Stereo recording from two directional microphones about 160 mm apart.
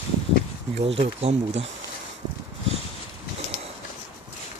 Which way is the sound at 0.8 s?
40° right (ahead or behind).